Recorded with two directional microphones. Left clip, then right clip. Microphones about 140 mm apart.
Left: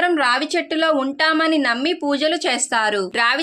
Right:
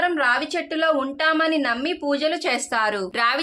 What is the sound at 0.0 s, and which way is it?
A woman's voice, 35° left (ahead or behind).